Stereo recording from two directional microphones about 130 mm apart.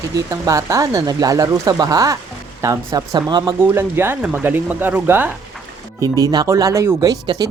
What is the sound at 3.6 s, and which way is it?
Speech, 15° right (ahead or behind).